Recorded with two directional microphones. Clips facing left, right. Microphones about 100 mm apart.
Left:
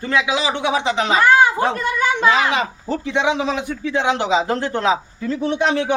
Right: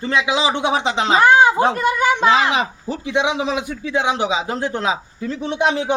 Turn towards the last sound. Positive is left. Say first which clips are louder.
# left 1 dB
turn(degrees=-20)  # may be behind; listen again after turning